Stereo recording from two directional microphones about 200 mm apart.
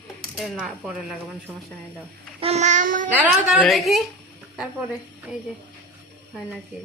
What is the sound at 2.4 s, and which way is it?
Child singing, 35° right (ahead or behind).